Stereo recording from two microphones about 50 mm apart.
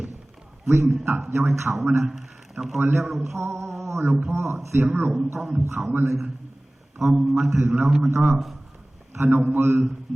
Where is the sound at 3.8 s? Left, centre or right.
Right.